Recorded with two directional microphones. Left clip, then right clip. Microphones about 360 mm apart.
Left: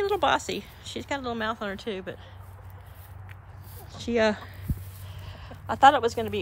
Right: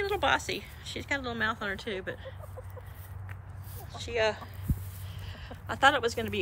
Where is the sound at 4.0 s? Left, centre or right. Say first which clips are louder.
Left 5 dB; centre.